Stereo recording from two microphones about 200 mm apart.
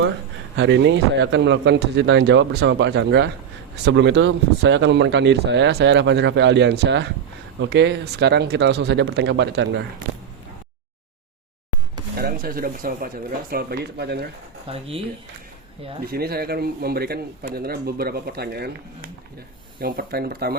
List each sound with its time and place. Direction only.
0.5 s speech: 65° right (ahead or behind)
12.2 s speech: 45° right (ahead or behind)
14.7 s speech: 30° right (ahead or behind)
16.0 s speech: 50° right (ahead or behind)